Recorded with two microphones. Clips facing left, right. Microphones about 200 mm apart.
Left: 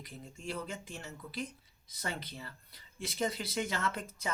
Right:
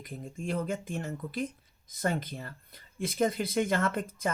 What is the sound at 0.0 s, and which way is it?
Speech, 50° right (ahead or behind).